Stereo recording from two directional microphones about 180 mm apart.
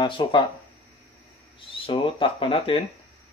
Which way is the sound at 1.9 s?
30° left (ahead or behind).